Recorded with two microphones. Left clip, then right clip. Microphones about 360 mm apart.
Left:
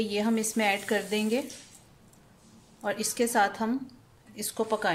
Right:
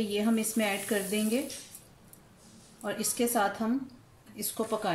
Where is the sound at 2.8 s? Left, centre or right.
Left.